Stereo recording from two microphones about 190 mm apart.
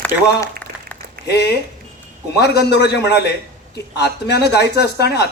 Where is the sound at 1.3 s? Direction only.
60° left (ahead or behind).